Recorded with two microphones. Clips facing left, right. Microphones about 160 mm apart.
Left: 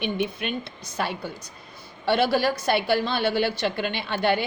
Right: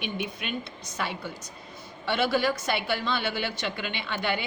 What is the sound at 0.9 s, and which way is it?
A woman's voice, 35° left (ahead or behind).